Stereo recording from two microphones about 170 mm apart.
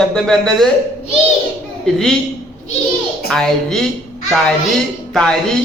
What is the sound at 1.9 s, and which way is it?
Speech, 5° left (ahead or behind).